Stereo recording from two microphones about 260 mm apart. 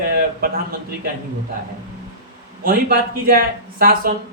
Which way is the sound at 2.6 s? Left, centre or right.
Right.